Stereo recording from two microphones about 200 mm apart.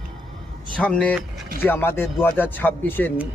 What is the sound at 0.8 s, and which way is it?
A man's voice, 5° left (ahead or behind).